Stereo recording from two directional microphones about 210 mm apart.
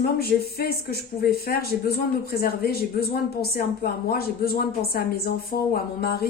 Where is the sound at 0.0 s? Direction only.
45° left (ahead or behind).